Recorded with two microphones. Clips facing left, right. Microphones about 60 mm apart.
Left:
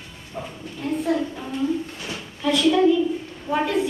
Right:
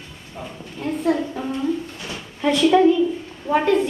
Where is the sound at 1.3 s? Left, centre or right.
Right.